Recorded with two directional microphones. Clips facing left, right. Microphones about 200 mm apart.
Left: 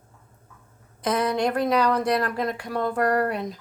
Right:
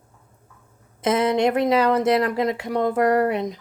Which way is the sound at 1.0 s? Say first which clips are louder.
Right 4 dB; 25° right (ahead or behind).